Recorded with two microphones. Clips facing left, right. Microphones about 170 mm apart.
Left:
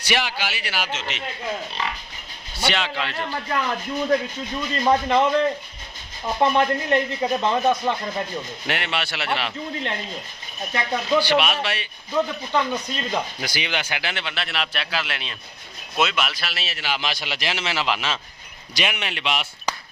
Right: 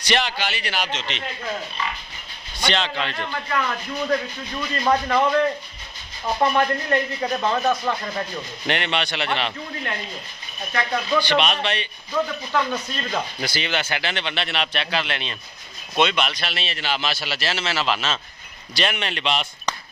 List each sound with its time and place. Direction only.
0.0 s speech: 10° left (ahead or behind)
2.6 s speech: 10° left (ahead or behind)
3.5 s speech: 25° left (ahead or behind)
6.4 s speech: 25° left (ahead or behind)
8.6 s speech: 5° left (ahead or behind)
10.7 s speech: 20° left (ahead or behind)
11.2 s speech: 10° left (ahead or behind)
12.1 s speech: 20° left (ahead or behind)